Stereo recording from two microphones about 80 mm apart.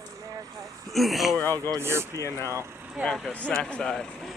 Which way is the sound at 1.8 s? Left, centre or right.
Right.